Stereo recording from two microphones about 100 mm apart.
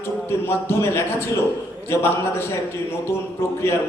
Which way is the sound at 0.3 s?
25° left (ahead or behind).